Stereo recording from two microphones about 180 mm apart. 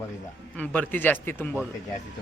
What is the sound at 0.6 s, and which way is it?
A man's voice, 10° left (ahead or behind).